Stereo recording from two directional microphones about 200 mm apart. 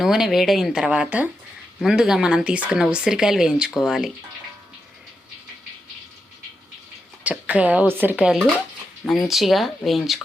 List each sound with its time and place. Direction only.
0.0 s speech: centre (ahead or behind)
7.3 s speech: 5° right (ahead or behind)